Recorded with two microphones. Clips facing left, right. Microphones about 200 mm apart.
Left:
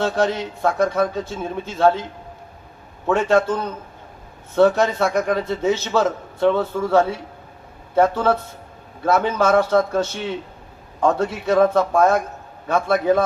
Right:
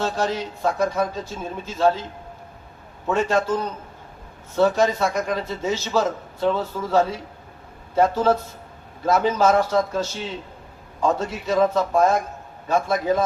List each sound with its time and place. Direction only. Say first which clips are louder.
0.0 s a man's voice: left 4 dB; 60° left (ahead or behind)
3.1 s a man's voice: left 3 dB; 60° left (ahead or behind)